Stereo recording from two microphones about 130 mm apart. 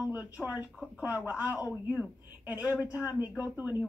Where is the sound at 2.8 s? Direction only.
10° right (ahead or behind).